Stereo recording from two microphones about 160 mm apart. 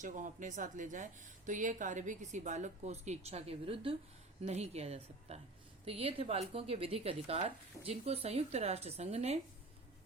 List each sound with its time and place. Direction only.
0.0 s a woman's voice: 55° right (ahead or behind)